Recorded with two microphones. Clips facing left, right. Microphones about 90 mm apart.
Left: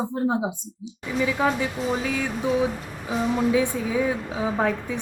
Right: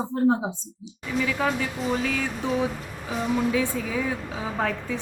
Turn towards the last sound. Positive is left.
turn(degrees=15)  # may be behind; listen again after turning